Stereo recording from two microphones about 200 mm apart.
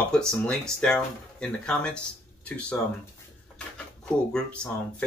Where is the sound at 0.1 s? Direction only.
5° left (ahead or behind).